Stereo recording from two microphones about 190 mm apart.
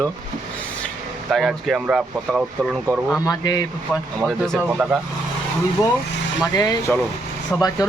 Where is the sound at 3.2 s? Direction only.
20° left (ahead or behind).